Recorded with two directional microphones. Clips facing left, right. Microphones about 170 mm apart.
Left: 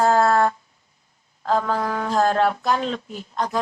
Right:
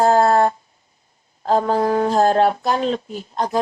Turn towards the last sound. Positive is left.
turn(degrees=-35)  # may be behind; listen again after turning